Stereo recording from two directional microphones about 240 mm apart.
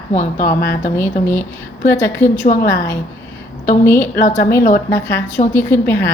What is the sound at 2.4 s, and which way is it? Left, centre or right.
Speech, left.